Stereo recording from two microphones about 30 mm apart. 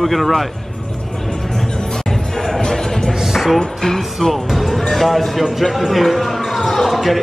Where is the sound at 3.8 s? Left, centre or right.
Left.